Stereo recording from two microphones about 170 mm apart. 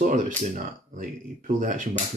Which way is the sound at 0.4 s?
50° right (ahead or behind).